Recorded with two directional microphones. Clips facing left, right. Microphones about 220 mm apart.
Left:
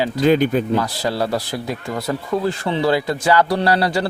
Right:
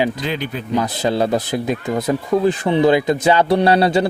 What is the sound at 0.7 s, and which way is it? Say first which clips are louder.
Speech: right 3 dB; 20° right (ahead or behind).